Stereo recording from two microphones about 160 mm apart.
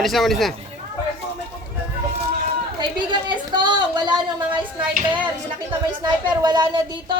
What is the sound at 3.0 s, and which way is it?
A woman's voice, 30° right (ahead or behind).